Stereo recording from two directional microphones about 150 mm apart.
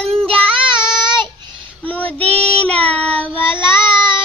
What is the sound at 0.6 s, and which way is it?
Child singing, 30° right (ahead or behind).